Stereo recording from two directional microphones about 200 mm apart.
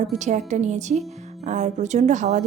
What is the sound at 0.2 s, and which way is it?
A woman's voice, 35° right (ahead or behind).